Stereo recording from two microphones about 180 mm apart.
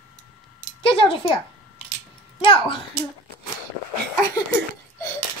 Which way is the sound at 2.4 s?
30° left (ahead or behind).